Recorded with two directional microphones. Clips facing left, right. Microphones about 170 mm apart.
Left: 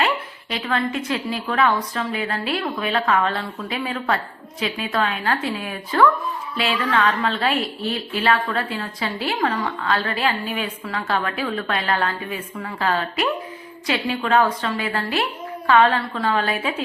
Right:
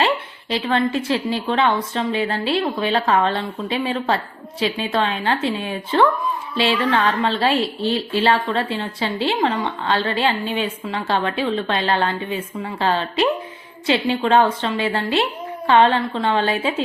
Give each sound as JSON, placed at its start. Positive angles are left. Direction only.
{"t": 0.5, "sound": "a woman's voice", "side_deg": -25}